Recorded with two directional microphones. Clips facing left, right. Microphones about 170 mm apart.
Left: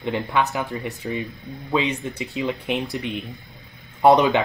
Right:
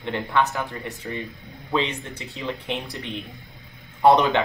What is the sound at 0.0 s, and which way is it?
Speech, 10° left (ahead or behind).